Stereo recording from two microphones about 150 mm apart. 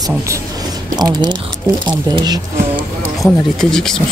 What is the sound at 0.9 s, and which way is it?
Speech, 25° right (ahead or behind).